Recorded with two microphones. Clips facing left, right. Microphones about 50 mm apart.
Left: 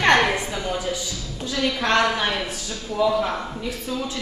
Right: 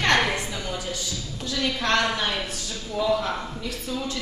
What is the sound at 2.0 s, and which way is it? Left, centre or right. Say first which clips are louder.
A man's voice: left 4 dB; left.